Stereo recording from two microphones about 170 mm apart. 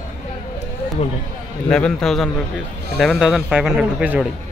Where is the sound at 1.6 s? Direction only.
5° left (ahead or behind).